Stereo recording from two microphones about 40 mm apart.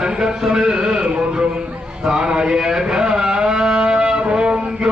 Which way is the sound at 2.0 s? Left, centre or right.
Centre.